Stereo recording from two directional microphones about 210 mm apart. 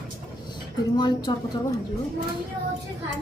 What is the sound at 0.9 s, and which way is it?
Speech, 20° left (ahead or behind).